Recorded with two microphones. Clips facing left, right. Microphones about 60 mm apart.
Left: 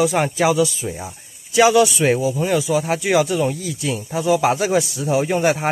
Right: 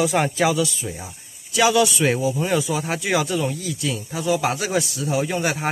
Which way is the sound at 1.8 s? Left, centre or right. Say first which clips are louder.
Left 3 dB; centre.